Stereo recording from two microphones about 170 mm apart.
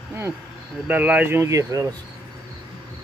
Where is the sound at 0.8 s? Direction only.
10° right (ahead or behind).